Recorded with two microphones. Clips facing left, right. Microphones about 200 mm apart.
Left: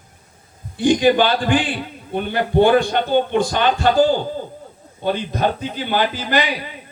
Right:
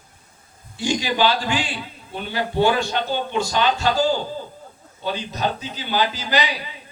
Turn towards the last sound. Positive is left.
turn(degrees=55)  # may be behind; listen again after turning